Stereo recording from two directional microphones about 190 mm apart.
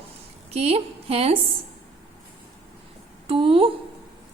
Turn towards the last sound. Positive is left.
turn(degrees=-30)  # may be behind; listen again after turning